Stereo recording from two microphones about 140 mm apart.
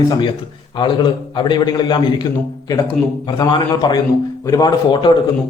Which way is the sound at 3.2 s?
30° left (ahead or behind).